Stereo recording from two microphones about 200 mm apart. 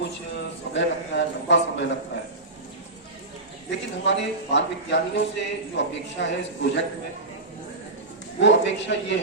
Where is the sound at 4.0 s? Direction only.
65° left (ahead or behind).